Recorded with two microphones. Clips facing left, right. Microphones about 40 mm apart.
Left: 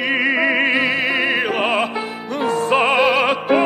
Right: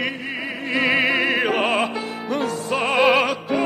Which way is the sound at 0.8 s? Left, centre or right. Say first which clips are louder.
Even; centre.